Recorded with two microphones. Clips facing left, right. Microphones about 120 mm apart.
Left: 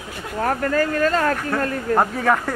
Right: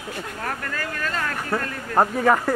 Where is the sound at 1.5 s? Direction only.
5° right (ahead or behind).